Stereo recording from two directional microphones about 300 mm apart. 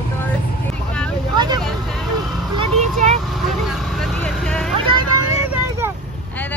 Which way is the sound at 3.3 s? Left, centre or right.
Centre.